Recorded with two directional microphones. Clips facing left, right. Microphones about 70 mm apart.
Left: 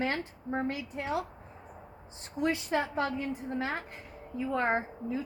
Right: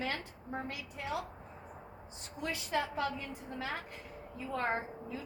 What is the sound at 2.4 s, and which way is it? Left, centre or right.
A woman's voice, left.